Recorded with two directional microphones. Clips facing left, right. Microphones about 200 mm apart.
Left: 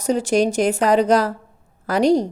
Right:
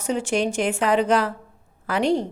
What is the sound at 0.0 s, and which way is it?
A woman's voice, 40° left (ahead or behind).